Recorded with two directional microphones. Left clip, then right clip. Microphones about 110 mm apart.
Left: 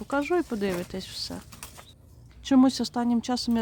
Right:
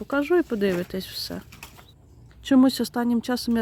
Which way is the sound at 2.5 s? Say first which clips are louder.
Right 2 dB; 35° right (ahead or behind).